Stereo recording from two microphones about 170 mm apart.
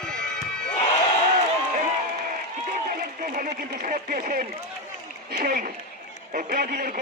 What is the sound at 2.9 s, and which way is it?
A man's voice, 55° right (ahead or behind).